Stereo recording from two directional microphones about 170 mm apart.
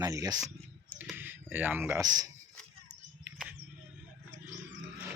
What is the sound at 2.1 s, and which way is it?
Speech, 25° right (ahead or behind).